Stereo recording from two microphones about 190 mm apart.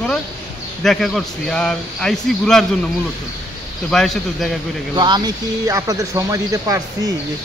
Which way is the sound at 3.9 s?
Centre (ahead or behind).